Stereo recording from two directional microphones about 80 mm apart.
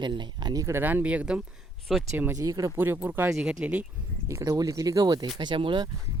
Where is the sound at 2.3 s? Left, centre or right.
Right.